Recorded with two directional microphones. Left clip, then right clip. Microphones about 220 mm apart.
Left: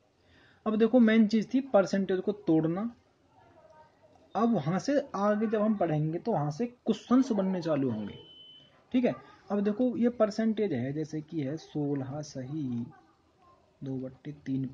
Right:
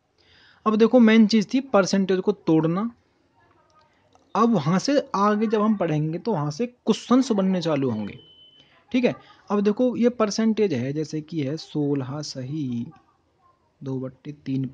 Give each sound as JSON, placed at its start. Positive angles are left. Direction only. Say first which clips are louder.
{"t": 0.7, "sound": "speech", "louder": "right 8 dB", "side_deg": -45}
{"t": 4.3, "sound": "speech", "louder": "right 8 dB", "side_deg": -45}
{"t": 13.8, "sound": "speech", "louder": "right 7 dB", "side_deg": -50}